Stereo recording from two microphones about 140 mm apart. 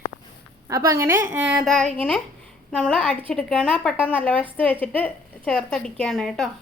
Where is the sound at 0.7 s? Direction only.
20° right (ahead or behind).